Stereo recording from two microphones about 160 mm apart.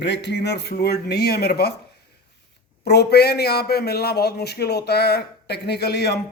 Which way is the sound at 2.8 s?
90° left.